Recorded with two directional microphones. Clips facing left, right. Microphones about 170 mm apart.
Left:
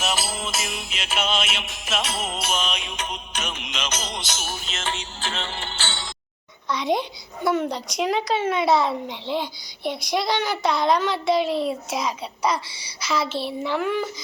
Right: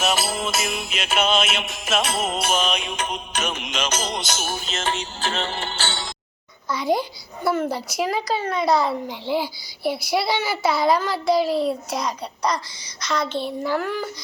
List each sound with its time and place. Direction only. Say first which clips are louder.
0.0 s music: right 4 dB; 60° right (ahead or behind); by 6.1 s 40° right (ahead or behind)
6.7 s a child's voice: right 1 dB; centre (ahead or behind)